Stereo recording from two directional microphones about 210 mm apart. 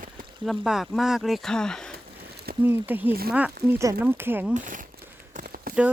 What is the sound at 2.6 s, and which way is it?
Speech, 10° right (ahead or behind).